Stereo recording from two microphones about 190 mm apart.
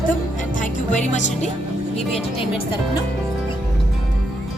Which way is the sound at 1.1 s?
40° left (ahead or behind).